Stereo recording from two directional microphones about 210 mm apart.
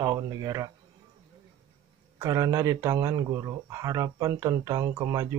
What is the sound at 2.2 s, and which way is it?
Speech, 15° right (ahead or behind).